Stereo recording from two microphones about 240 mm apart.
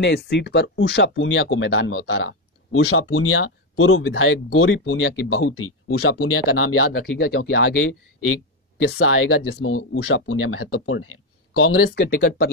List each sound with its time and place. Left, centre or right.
0.0 s speech: left
5.3 s speech: left
6.9 s speech: left
7.6 s speech: left